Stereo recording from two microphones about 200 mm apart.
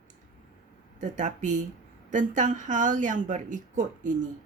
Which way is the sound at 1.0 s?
40° right (ahead or behind).